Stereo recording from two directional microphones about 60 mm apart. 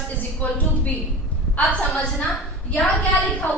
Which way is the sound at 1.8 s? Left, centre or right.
Left.